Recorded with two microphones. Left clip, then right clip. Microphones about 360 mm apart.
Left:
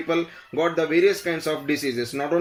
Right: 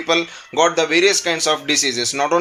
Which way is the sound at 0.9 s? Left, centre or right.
Centre.